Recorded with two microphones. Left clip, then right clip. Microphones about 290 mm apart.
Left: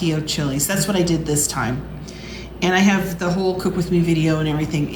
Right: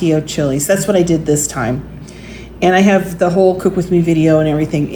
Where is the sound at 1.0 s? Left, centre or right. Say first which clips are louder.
Right 7 dB; left.